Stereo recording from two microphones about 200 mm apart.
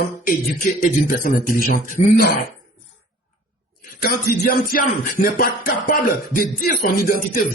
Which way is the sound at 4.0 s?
45° left (ahead or behind).